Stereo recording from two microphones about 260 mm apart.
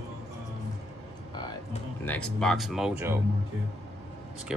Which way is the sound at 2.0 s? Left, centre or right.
Centre.